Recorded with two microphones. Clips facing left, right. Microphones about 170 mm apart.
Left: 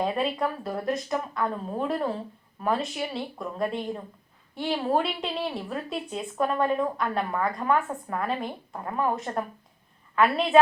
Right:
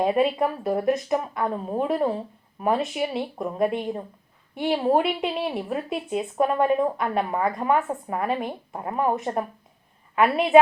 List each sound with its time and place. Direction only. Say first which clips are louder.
0.0 s a woman's voice: right 5 dB; 20° right (ahead or behind)